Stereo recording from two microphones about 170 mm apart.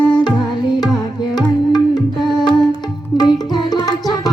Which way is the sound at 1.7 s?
25° left (ahead or behind).